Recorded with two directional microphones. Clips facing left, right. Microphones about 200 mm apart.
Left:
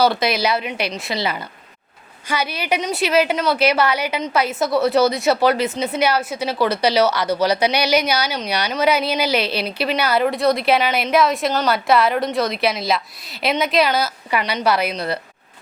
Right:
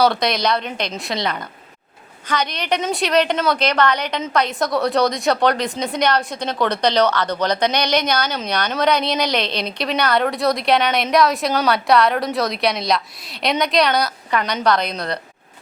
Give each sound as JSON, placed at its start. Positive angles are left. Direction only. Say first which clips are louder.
{"t": 0.0, "sound": "a woman's voice", "louder": "even", "side_deg": 5}